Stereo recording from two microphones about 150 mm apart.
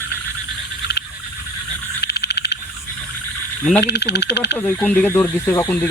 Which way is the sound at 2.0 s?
90° left.